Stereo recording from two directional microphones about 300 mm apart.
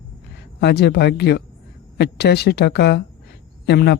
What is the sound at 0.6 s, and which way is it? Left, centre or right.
Speech, left.